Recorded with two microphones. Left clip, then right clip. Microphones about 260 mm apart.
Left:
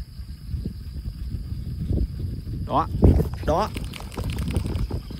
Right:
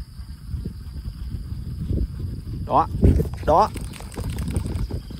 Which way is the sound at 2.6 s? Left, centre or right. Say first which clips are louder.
Right 4 dB; centre.